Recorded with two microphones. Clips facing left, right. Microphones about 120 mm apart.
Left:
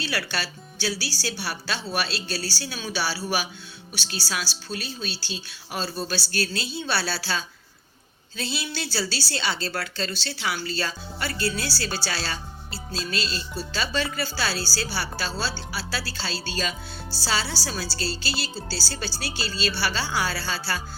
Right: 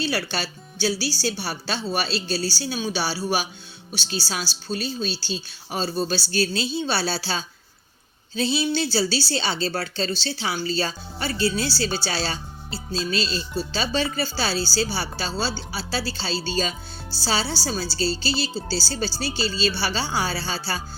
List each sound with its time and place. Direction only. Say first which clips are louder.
0.0 s a woman's voice: right 4 dB; 25° right (ahead or behind)